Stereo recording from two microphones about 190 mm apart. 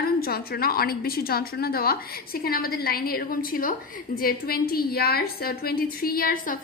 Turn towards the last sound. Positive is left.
turn(degrees=45)  # may be behind; listen again after turning